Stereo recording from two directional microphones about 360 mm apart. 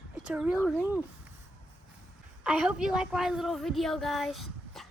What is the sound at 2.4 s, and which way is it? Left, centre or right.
A woman's voice, centre.